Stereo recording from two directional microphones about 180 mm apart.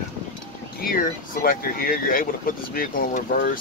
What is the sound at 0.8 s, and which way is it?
Speech, 50° left (ahead or behind).